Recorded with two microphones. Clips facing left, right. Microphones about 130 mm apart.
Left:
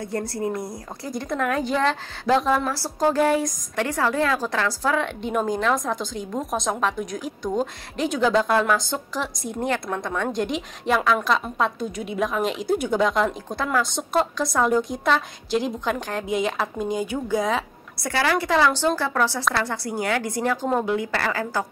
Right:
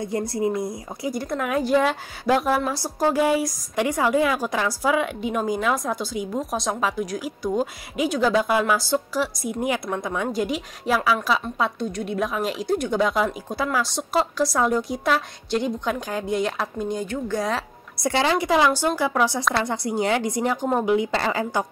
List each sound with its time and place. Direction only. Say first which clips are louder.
0.0 s a woman's voice: right 3 dB; 15° right (ahead or behind); by 17.6 s centre (ahead or behind)
17.9 s a woman's voice: right 2 dB; 20° right (ahead or behind)